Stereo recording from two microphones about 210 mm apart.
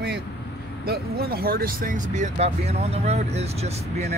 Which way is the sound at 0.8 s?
50° right (ahead or behind).